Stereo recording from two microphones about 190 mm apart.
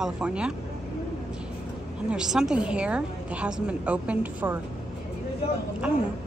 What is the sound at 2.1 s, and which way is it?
A woman's voice, 5° right (ahead or behind).